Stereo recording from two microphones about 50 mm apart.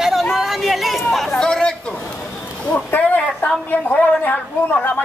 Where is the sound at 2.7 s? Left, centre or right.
Left.